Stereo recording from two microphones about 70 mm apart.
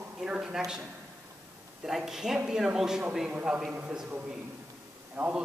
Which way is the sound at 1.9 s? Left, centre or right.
Centre.